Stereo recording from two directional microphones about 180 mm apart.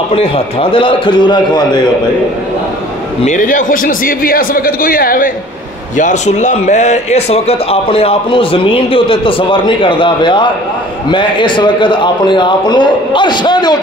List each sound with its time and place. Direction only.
0.1 s a man's voice: 30° left (ahead or behind)
3.2 s a man's voice: 45° left (ahead or behind); by 13.7 s 25° left (ahead or behind)